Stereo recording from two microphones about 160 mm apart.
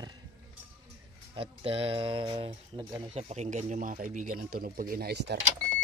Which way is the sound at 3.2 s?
45° right (ahead or behind).